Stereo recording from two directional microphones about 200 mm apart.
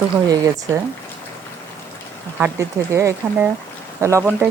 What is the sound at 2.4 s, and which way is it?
Speech, 15° right (ahead or behind).